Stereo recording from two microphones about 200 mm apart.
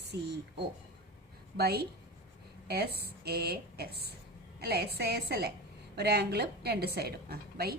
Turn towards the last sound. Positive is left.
turn(degrees=-50)  # may be behind; listen again after turning